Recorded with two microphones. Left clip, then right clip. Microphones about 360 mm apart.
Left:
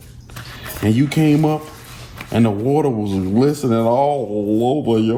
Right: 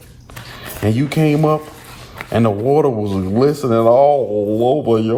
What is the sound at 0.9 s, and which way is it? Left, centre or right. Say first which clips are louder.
Speech: even; right.